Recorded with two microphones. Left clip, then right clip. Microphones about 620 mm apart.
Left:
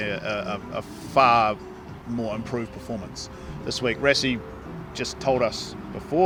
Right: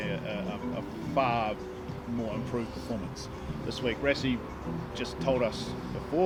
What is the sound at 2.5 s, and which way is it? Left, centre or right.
Speech, left.